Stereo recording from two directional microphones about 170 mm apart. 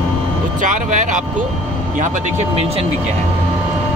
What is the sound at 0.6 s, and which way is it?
Speech, 45° right (ahead or behind).